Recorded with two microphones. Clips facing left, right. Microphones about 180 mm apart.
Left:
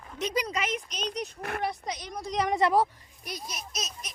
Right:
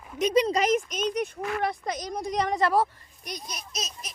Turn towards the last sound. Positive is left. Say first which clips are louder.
# right 1 dB
turn(degrees=0)  # may be behind; listen again after turning